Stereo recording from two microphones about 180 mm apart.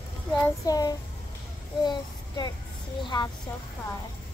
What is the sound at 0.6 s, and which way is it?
A child's voice, 20° left (ahead or behind).